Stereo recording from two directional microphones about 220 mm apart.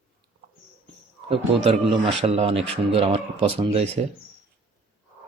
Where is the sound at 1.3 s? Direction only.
25° right (ahead or behind).